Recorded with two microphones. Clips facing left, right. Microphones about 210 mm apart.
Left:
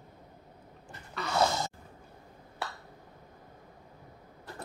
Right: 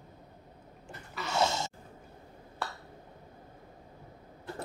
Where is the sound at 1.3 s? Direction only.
25° right (ahead or behind).